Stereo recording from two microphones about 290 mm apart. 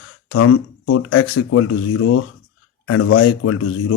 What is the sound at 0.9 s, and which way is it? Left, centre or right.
Speech, left.